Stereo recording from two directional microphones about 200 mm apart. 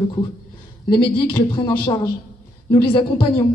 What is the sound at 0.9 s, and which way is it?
A man's voice, 15° left (ahead or behind).